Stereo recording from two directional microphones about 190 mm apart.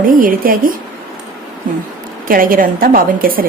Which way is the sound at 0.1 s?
45° right (ahead or behind).